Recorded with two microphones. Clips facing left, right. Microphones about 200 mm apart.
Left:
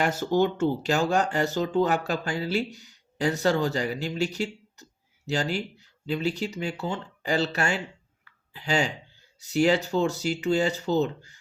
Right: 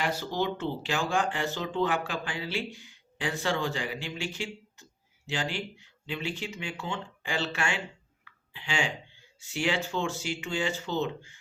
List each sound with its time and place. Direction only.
0.0 s speech: 50° left (ahead or behind)